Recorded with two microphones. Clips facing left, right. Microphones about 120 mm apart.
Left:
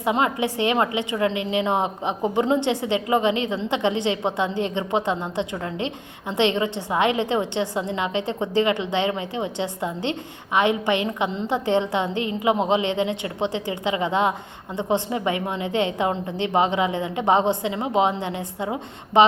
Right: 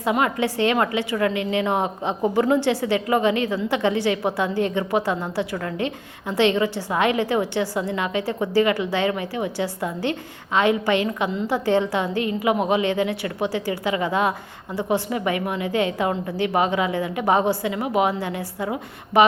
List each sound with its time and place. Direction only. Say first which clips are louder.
0.0 s a woman's voice: even; 20° left (ahead or behind)